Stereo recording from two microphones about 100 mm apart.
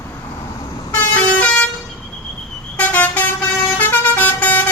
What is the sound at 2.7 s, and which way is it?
Vehicle, 15° left (ahead or behind).